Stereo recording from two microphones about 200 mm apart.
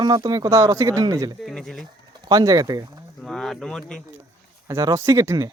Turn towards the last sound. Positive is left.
turn(degrees=-15)  # may be behind; listen again after turning